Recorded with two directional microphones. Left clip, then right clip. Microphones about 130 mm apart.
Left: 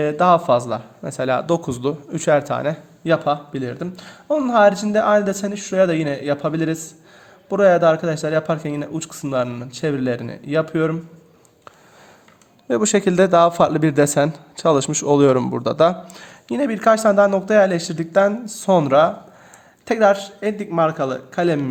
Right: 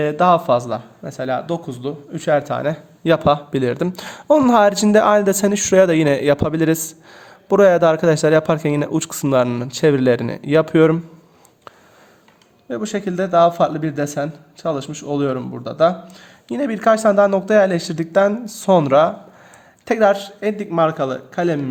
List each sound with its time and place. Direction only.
0.0 s speech: 15° right (ahead or behind)
1.0 s speech: 20° left (ahead or behind); by 2.0 s 40° left (ahead or behind)
2.1 s speech: 20° left (ahead or behind)
2.4 s speech: centre (ahead or behind)
3.0 s speech: 50° right (ahead or behind)
12.6 s a man's voice: 50° left (ahead or behind); by 16.3 s 30° left (ahead or behind)
16.5 s speech: centre (ahead or behind)